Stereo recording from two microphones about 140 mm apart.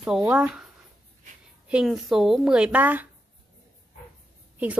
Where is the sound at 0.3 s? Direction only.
10° right (ahead or behind).